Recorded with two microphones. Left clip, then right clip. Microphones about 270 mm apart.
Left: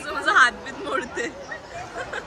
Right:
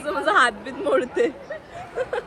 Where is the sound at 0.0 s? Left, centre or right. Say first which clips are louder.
Left 1 dB; centre.